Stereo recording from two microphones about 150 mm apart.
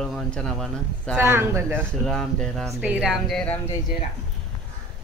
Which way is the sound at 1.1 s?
15° right (ahead or behind).